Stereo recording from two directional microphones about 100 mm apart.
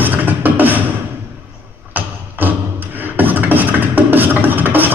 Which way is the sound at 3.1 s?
15° right (ahead or behind).